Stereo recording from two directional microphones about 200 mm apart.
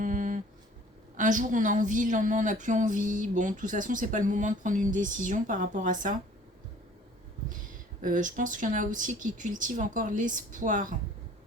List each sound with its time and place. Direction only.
0.0 s a sound: 40° right (ahead or behind)
1.1 s a woman's voice: 40° right (ahead or behind)
8.0 s a woman's voice: 40° right (ahead or behind)